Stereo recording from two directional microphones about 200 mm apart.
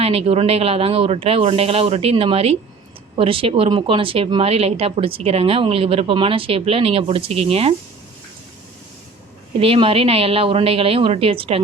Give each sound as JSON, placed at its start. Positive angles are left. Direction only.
{"t": 0.0, "sound": "speech", "side_deg": -30}
{"t": 9.6, "sound": "speech", "side_deg": -25}